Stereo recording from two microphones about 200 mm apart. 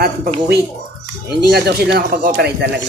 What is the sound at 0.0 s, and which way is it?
Speech, 50° right (ahead or behind).